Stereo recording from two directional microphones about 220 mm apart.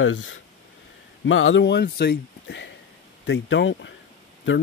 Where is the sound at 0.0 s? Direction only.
60° left (ahead or behind).